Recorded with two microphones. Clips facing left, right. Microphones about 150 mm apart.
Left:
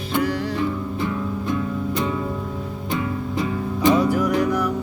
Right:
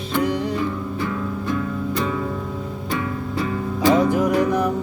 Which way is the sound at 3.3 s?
20° left (ahead or behind).